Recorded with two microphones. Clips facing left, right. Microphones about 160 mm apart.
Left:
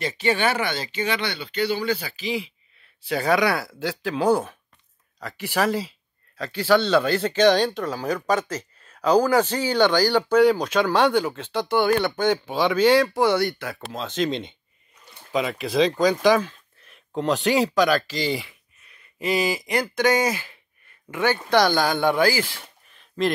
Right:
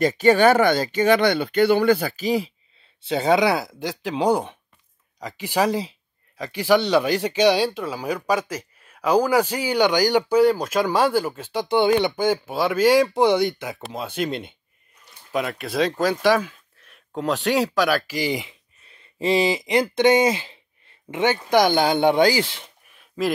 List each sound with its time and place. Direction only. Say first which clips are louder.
0.0 s speech: right 7 dB; 45° right (ahead or behind)
3.0 s speech: right 2 dB; 25° right (ahead or behind)
18.9 s speech: right 4 dB; 30° right (ahead or behind)
22.9 s a sound: even; 5° right (ahead or behind)